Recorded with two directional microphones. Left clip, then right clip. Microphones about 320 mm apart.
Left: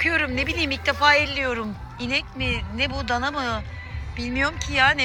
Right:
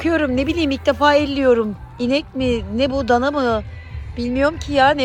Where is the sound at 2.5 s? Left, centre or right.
Right.